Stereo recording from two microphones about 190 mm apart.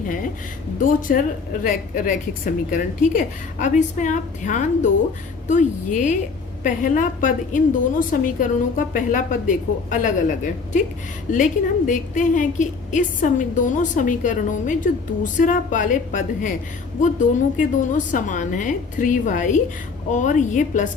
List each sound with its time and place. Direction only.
0.8 s a woman's voice: 45° left (ahead or behind)